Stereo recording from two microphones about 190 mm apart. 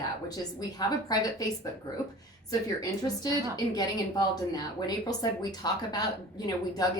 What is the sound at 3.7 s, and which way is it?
Speech, 20° left (ahead or behind).